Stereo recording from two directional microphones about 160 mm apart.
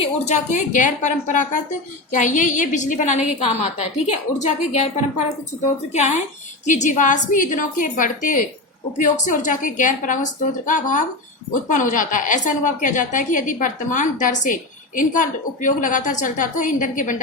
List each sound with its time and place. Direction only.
0.0 s a woman's voice: 50° left (ahead or behind)